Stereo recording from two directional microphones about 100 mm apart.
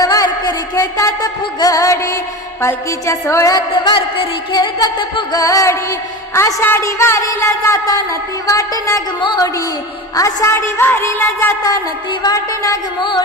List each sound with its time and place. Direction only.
0.0 s music: 35° left (ahead or behind)
2.6 s a woman's voice: 30° left (ahead or behind)
3.7 s music: 60° left (ahead or behind)
4.5 s music: 45° left (ahead or behind)
10.2 s a woman's voice: 30° left (ahead or behind)
12.2 s music: 35° left (ahead or behind)
13.0 s a sound: 55° left (ahead or behind)